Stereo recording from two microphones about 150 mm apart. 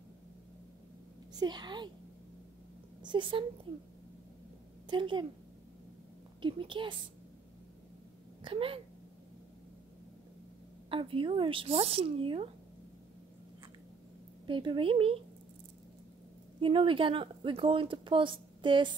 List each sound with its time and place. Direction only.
1.3 s a woman's voice: 30° right (ahead or behind)
3.0 s speech: 30° right (ahead or behind)
4.8 s a woman's voice: 30° right (ahead or behind)
6.4 s speech: 35° right (ahead or behind)
8.5 s speech: 35° right (ahead or behind)
10.9 s speech: 35° right (ahead or behind)
14.4 s speech: 30° right (ahead or behind)
16.5 s speech: 35° right (ahead or behind)